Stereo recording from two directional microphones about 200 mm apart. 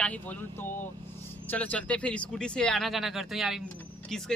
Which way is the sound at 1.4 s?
10° left (ahead or behind).